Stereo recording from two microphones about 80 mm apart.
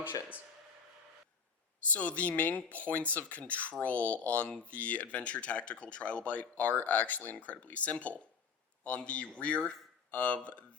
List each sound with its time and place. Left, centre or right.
1.9 s speech: centre